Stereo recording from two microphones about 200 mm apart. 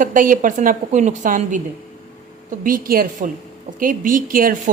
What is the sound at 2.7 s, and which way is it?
Speech, 45° right (ahead or behind).